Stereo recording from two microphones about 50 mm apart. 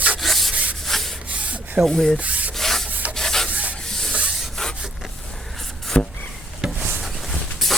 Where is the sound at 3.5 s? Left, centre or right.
Right.